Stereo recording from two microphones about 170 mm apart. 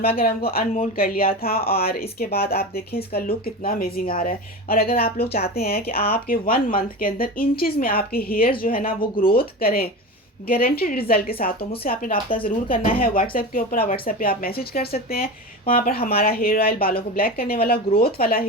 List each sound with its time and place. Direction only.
0.0 s speech: 60° left (ahead or behind)